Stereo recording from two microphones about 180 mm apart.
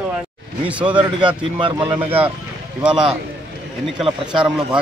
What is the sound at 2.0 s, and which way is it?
Speech, 10° right (ahead or behind).